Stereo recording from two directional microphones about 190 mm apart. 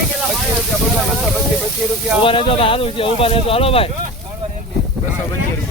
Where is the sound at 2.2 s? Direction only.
30° left (ahead or behind).